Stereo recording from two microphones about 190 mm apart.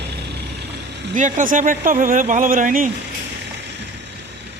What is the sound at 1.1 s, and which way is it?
Speech, 40° right (ahead or behind).